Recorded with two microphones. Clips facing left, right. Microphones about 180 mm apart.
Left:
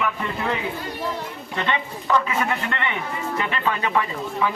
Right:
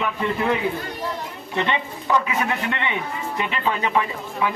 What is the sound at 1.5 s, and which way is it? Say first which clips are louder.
A man's voice: right 2 dB; 20° right (ahead or behind).